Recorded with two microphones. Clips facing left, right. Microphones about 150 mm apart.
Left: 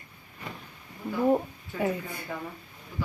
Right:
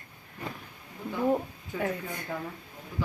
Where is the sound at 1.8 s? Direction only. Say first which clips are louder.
Left 3 dB; 10° left (ahead or behind).